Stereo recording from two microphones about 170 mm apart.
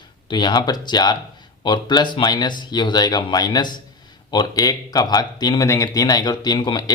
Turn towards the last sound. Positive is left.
turn(degrees=25)  # may be behind; listen again after turning